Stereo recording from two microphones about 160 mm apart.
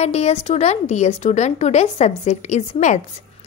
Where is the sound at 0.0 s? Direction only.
45° left (ahead or behind).